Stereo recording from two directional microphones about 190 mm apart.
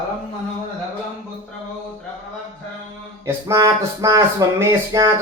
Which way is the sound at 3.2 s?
15° right (ahead or behind).